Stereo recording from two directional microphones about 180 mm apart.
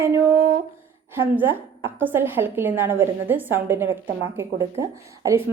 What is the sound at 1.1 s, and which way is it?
A woman's voice, 10° right (ahead or behind).